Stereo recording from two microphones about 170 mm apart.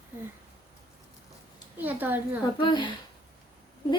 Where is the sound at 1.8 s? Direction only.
10° right (ahead or behind).